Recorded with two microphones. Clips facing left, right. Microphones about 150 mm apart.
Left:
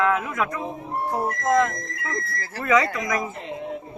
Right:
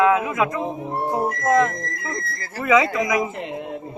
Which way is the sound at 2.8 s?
15° right (ahead or behind).